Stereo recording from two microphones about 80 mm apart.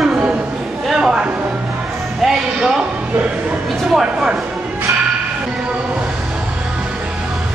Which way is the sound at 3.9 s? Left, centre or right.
Centre.